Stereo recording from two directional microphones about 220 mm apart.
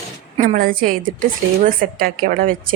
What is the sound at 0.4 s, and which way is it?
Speech, 40° right (ahead or behind).